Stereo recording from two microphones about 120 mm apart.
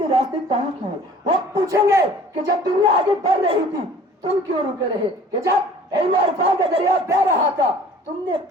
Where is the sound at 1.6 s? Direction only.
25° right (ahead or behind).